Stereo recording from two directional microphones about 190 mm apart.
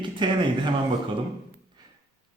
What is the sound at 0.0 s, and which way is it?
Speech, 25° right (ahead or behind).